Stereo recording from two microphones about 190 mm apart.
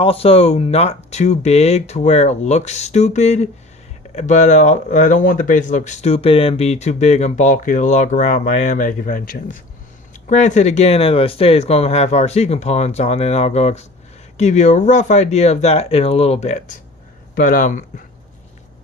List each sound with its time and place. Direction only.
0.0 s speech: 30° left (ahead or behind)
17.3 s speech: 50° left (ahead or behind)